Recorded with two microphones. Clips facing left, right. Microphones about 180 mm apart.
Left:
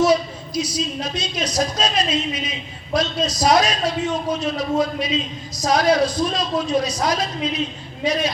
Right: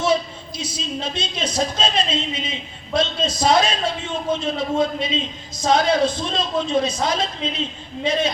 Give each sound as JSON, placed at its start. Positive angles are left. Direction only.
{"t": 0.0, "sound": "a woman's voice", "side_deg": -25}